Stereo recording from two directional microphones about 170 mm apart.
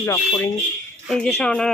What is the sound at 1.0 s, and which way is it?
Speech, 5° left (ahead or behind).